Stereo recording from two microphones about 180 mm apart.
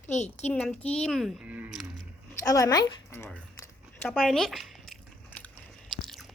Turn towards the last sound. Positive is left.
turn(degrees=0)  # may be behind; listen again after turning